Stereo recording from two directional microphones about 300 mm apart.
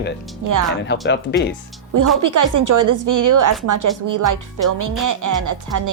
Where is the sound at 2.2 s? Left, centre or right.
Right.